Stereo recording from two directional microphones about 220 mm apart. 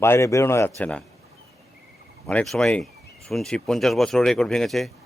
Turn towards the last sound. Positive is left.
turn(degrees=0)  # may be behind; listen again after turning